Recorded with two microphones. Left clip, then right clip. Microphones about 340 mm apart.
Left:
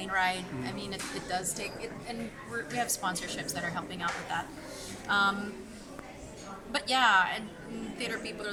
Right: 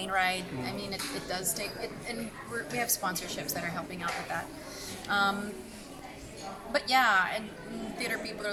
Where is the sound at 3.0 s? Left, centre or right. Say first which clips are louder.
Even; centre.